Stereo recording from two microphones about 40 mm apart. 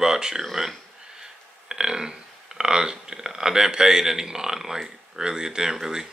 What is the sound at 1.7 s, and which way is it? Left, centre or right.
Speech, centre.